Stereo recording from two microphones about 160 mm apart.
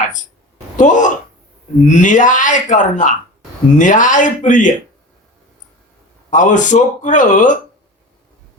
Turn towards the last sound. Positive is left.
turn(degrees=55)  # may be behind; listen again after turning